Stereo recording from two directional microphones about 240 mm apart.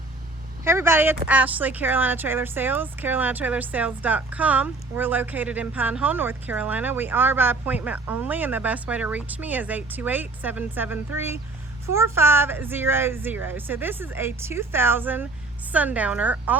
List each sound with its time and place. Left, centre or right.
0.6 s speech: centre